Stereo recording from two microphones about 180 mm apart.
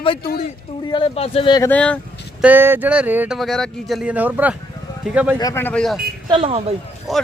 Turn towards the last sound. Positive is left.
turn(degrees=0)  # may be behind; listen again after turning